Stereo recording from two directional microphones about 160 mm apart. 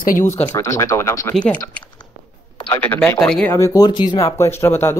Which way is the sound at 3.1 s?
5° left (ahead or behind).